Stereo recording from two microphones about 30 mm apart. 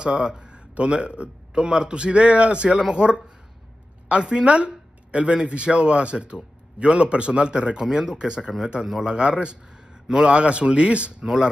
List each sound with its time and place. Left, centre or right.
0.0 s speech: right
1.6 s speech: right
4.5 s a sound: right
5.4 s speech: right
7.8 s speech: right